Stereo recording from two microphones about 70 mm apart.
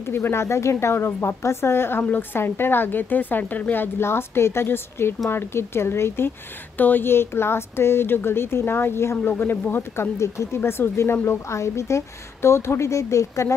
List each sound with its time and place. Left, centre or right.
0.1 s a woman's voice: left
10.1 s a woman's voice: left